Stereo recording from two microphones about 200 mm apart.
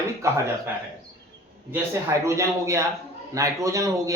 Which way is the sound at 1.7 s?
15° right (ahead or behind).